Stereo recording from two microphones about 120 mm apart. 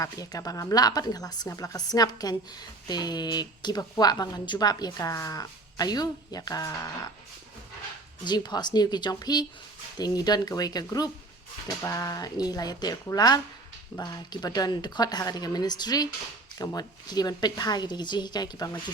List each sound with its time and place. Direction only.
0.0 s a woman's voice: 30° left (ahead or behind)
8.2 s a woman's voice: 35° left (ahead or behind)